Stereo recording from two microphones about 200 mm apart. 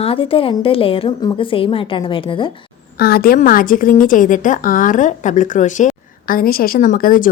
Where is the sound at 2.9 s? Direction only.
50° left (ahead or behind).